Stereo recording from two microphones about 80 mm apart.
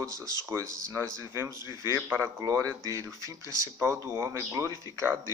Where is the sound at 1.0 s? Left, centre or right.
Left.